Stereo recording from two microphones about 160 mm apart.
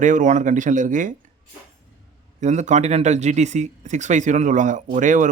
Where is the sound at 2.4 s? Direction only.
50° right (ahead or behind).